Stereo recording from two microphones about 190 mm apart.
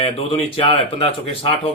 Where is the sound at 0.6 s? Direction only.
30° left (ahead or behind).